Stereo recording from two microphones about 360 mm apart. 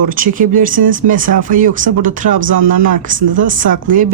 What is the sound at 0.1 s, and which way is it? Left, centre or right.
Speech, right.